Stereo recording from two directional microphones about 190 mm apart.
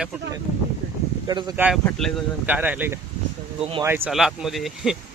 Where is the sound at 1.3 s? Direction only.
25° right (ahead or behind).